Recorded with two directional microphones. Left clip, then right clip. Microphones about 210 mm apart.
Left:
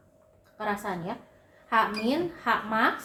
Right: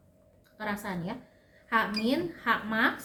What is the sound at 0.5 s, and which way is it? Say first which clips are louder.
A woman's voice: left 4 dB; 45° right (ahead or behind).